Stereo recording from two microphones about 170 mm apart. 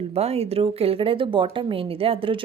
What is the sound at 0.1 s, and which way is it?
A woman's voice, 35° right (ahead or behind).